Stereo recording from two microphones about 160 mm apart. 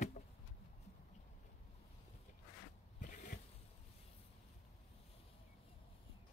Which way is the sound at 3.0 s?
55° left (ahead or behind).